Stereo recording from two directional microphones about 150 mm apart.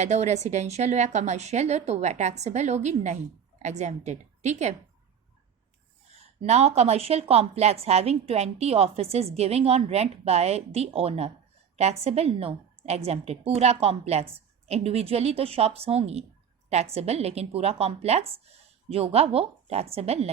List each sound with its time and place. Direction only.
0.0 s a woman's voice: 50° right (ahead or behind)
6.4 s a woman's voice: 45° right (ahead or behind)